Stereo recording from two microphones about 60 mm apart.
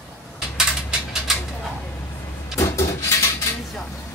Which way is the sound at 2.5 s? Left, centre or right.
Left.